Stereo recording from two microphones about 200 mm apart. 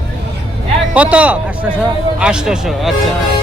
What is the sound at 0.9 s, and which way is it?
Speech, 5° right (ahead or behind).